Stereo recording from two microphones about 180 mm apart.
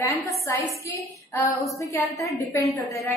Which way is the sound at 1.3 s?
15° left (ahead or behind).